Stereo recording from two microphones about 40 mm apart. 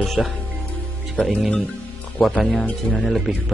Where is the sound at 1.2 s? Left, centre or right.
Left.